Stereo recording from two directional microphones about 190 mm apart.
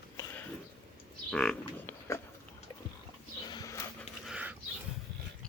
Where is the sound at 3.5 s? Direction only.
20° left (ahead or behind).